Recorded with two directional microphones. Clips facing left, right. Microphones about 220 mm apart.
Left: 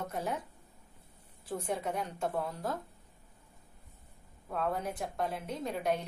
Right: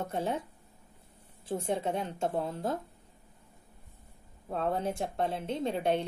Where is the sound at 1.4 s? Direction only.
25° right (ahead or behind).